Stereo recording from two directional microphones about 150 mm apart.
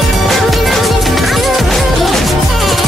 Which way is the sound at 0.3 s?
Centre (ahead or behind).